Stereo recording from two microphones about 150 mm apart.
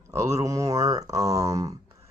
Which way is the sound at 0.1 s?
20° right (ahead or behind).